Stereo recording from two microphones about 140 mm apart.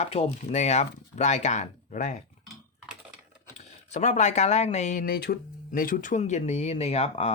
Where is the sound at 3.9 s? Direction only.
55° left (ahead or behind).